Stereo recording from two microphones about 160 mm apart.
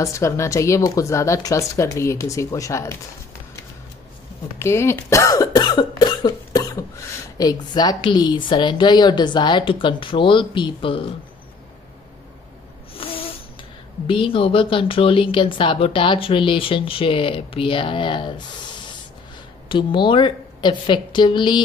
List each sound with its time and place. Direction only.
0.0 s a woman's voice: 20° left (ahead or behind)
4.6 s a woman's voice: 15° left (ahead or behind); by 11.1 s 35° left (ahead or behind)
12.9 s a sound: 35° left (ahead or behind)
14.0 s speech: 35° left (ahead or behind)
19.7 s a woman's voice: 30° left (ahead or behind)